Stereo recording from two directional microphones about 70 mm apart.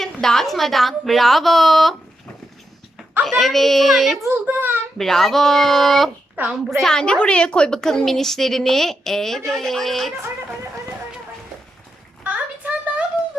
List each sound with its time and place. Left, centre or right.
0.0 s a woman's voice: centre
3.2 s a woman's voice: centre
4.4 s a child's voice: right
4.9 s a woman's voice: centre
6.3 s a child's voice: right
6.7 s a woman's voice: centre
12.2 s a sound: right